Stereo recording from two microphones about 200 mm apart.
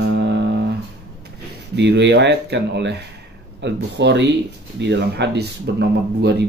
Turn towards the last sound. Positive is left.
turn(degrees=-55)  # may be behind; listen again after turning